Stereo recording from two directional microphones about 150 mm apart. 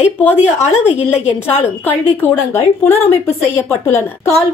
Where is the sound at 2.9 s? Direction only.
45° left (ahead or behind).